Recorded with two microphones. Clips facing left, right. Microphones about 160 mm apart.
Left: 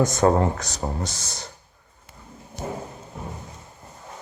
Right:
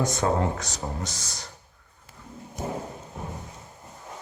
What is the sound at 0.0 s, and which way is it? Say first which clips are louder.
Speech: left 5 dB; 45° left (ahead or behind).